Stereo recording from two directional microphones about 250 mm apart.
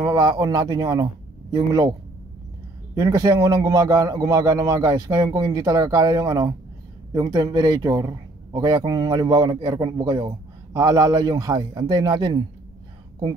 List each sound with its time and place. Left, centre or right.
0.0 s a man's voice: centre